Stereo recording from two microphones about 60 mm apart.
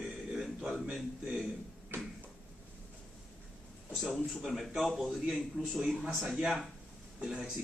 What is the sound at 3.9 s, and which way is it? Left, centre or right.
A man's voice, centre.